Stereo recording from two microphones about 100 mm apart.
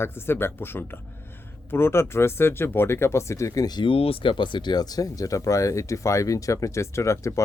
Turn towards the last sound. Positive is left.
turn(degrees=30)  # may be behind; listen again after turning